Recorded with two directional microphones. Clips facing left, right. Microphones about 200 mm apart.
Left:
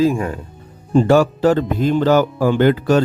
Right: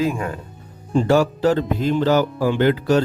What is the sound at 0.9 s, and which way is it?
A man's voice, 50° left (ahead or behind).